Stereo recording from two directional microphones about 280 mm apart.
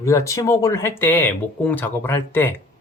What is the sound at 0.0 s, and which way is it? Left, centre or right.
Speech, centre.